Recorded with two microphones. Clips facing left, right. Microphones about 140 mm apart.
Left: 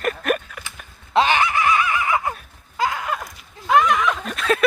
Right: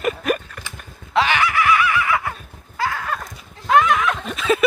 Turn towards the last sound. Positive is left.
turn(degrees=0)  # may be behind; listen again after turning